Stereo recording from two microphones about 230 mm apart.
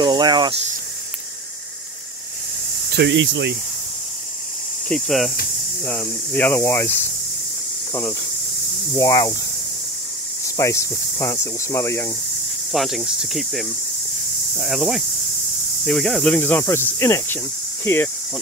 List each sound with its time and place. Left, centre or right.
0.0 s speech: centre
3.0 s speech: right
4.8 s speech: centre
8.9 s speech: centre
10.6 s speech: centre
12.7 s speech: centre